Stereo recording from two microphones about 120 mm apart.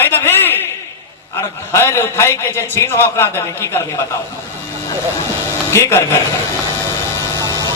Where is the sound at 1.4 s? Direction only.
25° left (ahead or behind).